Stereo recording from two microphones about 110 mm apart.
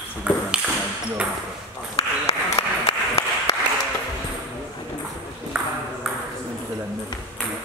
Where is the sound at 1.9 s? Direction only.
65° left (ahead or behind).